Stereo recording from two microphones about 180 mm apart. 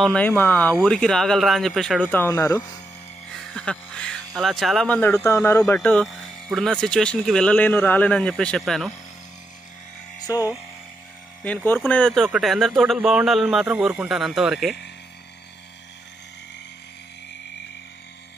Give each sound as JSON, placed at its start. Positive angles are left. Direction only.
{"t": 0.0, "sound": "speech", "side_deg": 5}
{"t": 2.1, "sound": "speech", "side_deg": 15}
{"t": 3.5, "sound": "music", "side_deg": 5}
{"t": 4.4, "sound": "speech", "side_deg": 0}
{"t": 10.3, "sound": "speech", "side_deg": 20}